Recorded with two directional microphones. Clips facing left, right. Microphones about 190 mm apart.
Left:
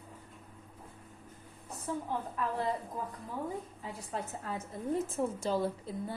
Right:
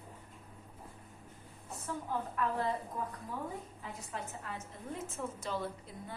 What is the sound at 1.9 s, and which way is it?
Speech, 30° left (ahead or behind).